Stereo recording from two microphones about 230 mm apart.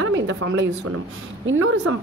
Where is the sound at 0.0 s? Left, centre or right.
Right.